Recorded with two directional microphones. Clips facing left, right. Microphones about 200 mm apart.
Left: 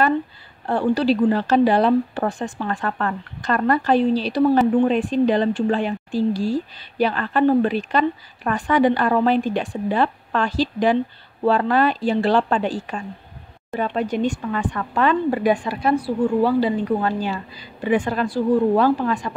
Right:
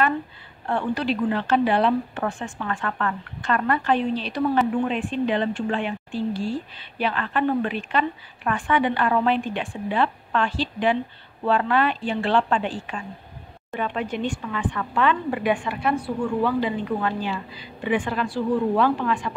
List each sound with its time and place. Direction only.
0.7 s speech: 35° left (ahead or behind)